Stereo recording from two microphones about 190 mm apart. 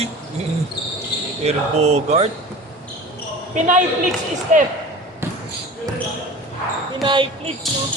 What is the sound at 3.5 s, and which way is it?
Speech, 40° right (ahead or behind).